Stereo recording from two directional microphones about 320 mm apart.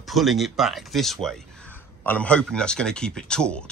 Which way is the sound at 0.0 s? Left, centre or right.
Centre.